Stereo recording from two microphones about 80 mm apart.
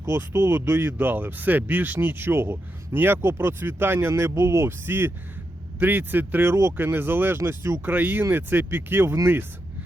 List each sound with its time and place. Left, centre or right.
0.0 s speech: right